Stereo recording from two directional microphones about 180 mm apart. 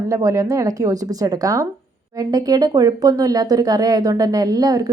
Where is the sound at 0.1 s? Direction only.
20° right (ahead or behind).